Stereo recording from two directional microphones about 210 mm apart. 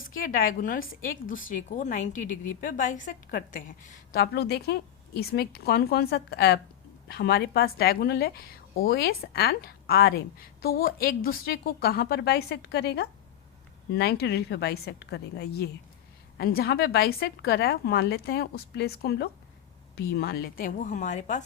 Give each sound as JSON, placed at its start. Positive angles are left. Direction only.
{"t": 0.2, "sound": "a woman's voice", "side_deg": 40}